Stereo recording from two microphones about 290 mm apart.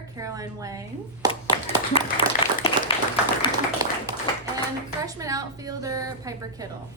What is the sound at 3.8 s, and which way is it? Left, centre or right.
Speech, centre.